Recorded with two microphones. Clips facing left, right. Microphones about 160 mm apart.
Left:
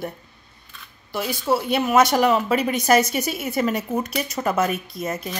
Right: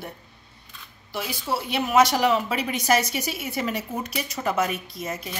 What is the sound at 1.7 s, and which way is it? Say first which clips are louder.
A woman's voice: left 1 dB; 50° left (ahead or behind).